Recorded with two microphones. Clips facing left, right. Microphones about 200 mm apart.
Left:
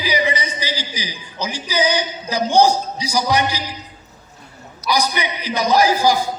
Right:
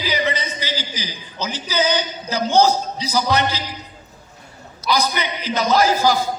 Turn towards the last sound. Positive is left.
turn(degrees=15)  # may be behind; listen again after turning